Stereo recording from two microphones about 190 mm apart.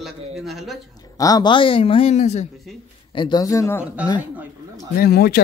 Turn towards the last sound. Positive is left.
turn(degrees=55)  # may be behind; listen again after turning